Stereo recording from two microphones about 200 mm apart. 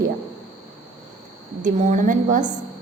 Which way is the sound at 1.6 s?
40° right (ahead or behind).